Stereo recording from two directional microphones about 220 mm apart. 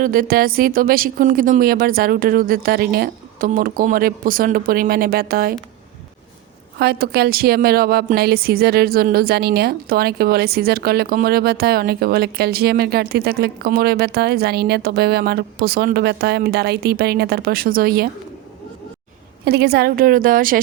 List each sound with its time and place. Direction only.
0.0 s speech: 40° right (ahead or behind)
6.7 s a woman's voice: 45° right (ahead or behind)
19.5 s speech: 45° right (ahead or behind)